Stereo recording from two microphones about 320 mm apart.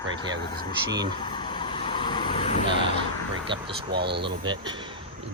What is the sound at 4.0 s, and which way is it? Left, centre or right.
Speech, right.